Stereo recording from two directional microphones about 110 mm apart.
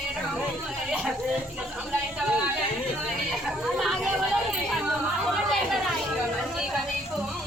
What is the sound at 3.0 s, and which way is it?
Chatter, centre (ahead or behind).